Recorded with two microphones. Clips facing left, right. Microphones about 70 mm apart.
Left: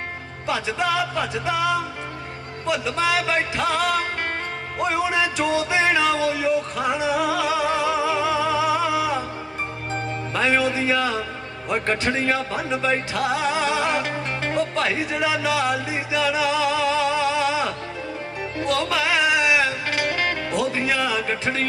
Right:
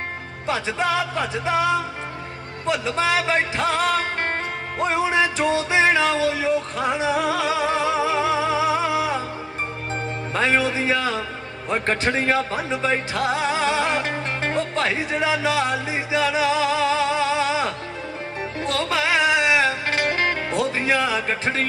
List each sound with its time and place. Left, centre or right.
0.5 s music: right
10.3 s a man's voice: right
18.9 s music: right